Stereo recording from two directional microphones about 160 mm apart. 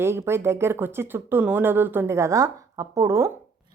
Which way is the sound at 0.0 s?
15° right (ahead or behind).